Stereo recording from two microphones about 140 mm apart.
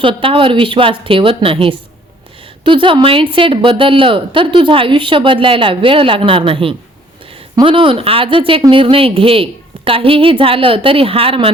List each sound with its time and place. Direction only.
0.0 s a woman's voice: 40° right (ahead or behind)